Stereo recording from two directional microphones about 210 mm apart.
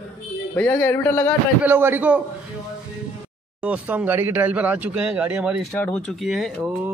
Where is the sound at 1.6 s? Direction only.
10° right (ahead or behind).